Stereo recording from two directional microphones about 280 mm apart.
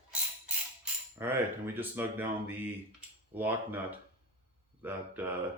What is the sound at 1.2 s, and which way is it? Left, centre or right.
Speech, centre.